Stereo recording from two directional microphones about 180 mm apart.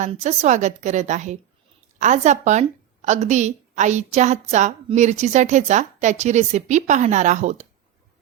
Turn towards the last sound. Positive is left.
turn(degrees=-40)  # may be behind; listen again after turning